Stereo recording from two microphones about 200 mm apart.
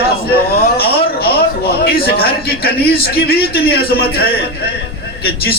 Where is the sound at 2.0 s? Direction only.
50° left (ahead or behind).